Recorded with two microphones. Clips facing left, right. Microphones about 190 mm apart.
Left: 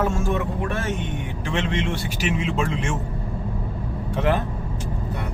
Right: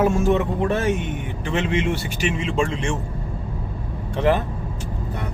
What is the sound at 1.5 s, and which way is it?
Speech, 5° right (ahead or behind).